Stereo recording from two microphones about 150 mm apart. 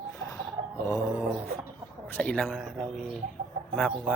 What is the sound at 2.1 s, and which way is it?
Speech, 10° left (ahead or behind).